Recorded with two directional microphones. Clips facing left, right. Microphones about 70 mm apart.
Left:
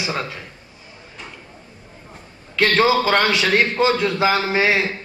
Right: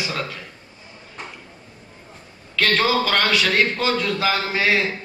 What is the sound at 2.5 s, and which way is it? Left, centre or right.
Speech, left.